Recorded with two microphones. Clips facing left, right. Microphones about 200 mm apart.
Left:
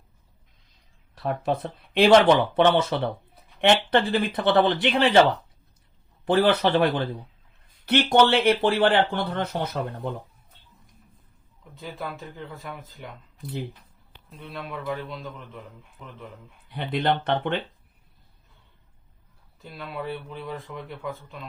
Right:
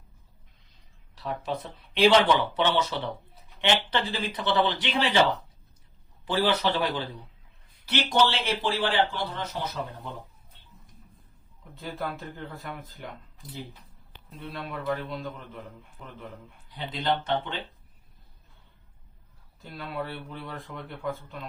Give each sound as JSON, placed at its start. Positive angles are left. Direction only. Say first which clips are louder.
{"t": 1.1, "sound": "speech", "louder": "left 6 dB", "side_deg": 55}
{"t": 6.2, "sound": "speech", "louder": "left 5 dB", "side_deg": 55}
{"t": 11.7, "sound": "speech", "louder": "right 1 dB", "side_deg": 0}
{"t": 14.3, "sound": "speech", "louder": "left 1 dB", "side_deg": 0}
{"t": 16.6, "sound": "speech", "louder": "left 4 dB", "side_deg": 60}
{"t": 19.7, "sound": "speech", "louder": "left 2 dB", "side_deg": 0}